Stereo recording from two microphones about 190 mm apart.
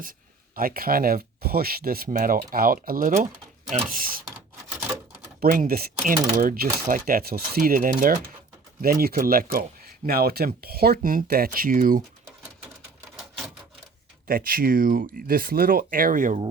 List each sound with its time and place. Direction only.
0.5 s speech: 50° right (ahead or behind)
5.4 s speech: 50° right (ahead or behind)
14.3 s speech: 50° right (ahead or behind)